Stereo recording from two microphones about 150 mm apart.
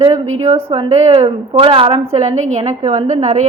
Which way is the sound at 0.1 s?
40° right (ahead or behind).